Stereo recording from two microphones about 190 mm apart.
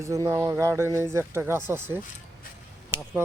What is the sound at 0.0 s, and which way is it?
Speech, 15° right (ahead or behind).